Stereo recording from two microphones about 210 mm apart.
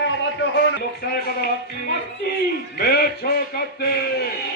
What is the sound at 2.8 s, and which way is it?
A man's voice, 50° left (ahead or behind).